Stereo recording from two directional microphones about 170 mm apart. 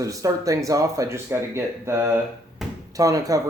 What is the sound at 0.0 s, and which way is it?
Speech, 20° right (ahead or behind).